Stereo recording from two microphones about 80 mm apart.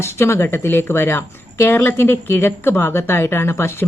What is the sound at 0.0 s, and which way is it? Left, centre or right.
Speech, left.